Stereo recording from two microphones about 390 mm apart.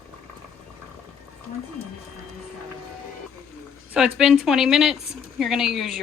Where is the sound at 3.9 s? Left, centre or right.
Centre.